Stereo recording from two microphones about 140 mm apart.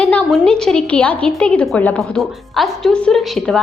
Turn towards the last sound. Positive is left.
turn(degrees=5)  # may be behind; listen again after turning